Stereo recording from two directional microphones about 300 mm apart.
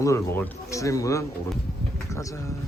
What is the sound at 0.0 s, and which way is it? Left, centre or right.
Music, centre.